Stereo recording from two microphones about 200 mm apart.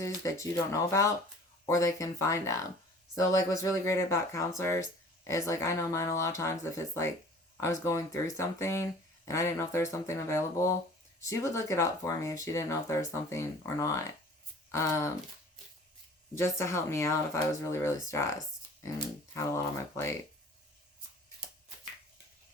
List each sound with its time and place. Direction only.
0.2 s speech: 15° left (ahead or behind)
16.3 s speech: 15° left (ahead or behind)